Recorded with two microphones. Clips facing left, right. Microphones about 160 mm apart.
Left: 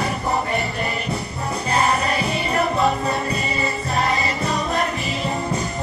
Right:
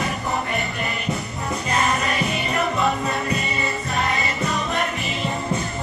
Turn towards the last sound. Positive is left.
turn(degrees=35)  # may be behind; listen again after turning